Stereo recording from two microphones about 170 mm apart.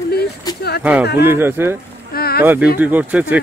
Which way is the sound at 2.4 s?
10° right (ahead or behind).